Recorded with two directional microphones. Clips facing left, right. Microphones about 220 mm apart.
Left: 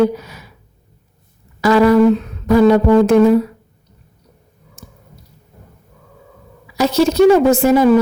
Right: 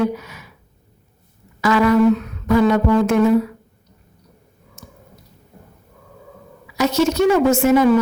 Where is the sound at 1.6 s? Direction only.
35° left (ahead or behind).